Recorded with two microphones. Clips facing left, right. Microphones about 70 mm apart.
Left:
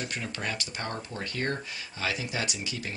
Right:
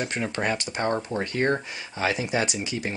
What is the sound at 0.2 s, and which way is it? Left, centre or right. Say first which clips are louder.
Speech: right 8 dB; right.